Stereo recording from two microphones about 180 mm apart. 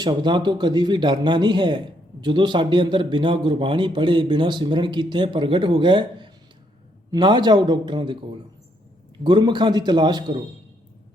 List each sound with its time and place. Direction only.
0.0 s a man's voice: 25° right (ahead or behind)